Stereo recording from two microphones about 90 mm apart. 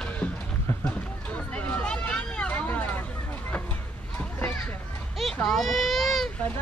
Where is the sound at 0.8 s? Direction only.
15° left (ahead or behind).